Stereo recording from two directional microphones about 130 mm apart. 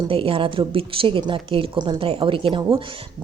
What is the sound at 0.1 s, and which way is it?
A woman's voice, 45° right (ahead or behind).